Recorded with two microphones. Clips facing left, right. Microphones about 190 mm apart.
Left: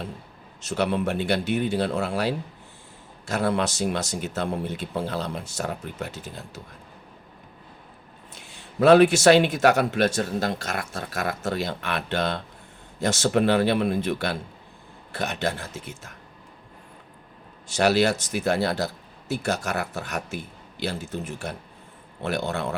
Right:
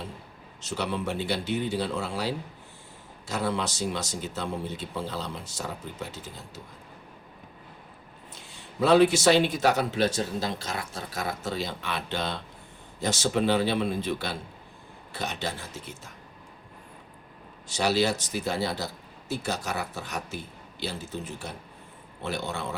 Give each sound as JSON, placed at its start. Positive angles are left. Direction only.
{"t": 0.7, "sound": "speech", "side_deg": 60}
{"t": 8.8, "sound": "speech", "side_deg": 65}
{"t": 17.7, "sound": "speech", "side_deg": 70}
{"t": 22.4, "sound": "speech", "side_deg": 60}